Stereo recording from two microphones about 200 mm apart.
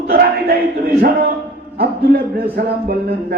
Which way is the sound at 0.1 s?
50° right (ahead or behind).